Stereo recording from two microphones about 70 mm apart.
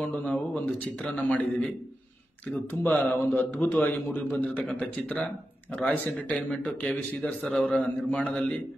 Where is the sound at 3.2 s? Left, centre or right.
Left.